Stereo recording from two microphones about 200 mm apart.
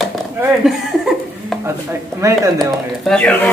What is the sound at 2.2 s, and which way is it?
Speech, 15° right (ahead or behind).